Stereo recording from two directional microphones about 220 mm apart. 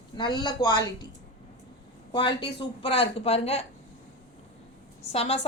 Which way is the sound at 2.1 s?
20° left (ahead or behind).